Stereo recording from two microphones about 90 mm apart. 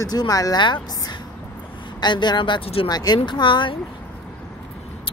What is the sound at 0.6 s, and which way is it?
A woman's voice, 60° left (ahead or behind).